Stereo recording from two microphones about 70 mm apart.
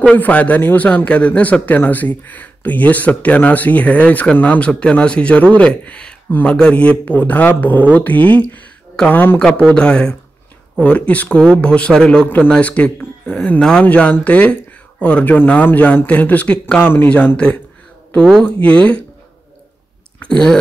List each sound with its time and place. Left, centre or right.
0.0 s speech: left
9.4 s speech: centre
16.8 s speech: left
18.4 s speech: centre
20.2 s a sound: centre